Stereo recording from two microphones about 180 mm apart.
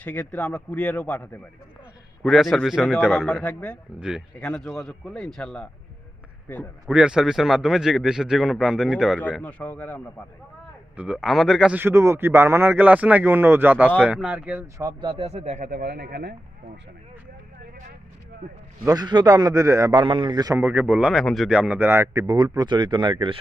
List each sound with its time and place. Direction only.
0.0 s a man's voice: 5° left (ahead or behind)
4.0 s a man's voice: 5° right (ahead or behind)
6.8 s a man's voice: 5° right (ahead or behind)
9.4 s speech: 10° left (ahead or behind)
10.9 s a man's voice: 5° right (ahead or behind)
14.8 s speech: 25° right (ahead or behind); by 16.3 s 60° right (ahead or behind)
18.9 s a man's voice: 25° right (ahead or behind)